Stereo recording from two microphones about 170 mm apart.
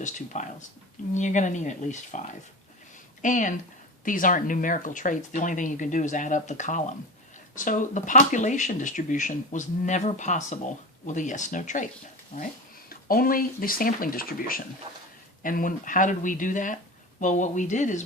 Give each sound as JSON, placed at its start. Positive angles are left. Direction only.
{"t": 0.3, "sound": "speech", "side_deg": 45}
{"t": 12.9, "sound": "speech", "side_deg": 60}